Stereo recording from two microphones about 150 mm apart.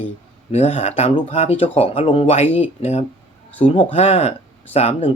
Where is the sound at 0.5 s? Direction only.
45° left (ahead or behind).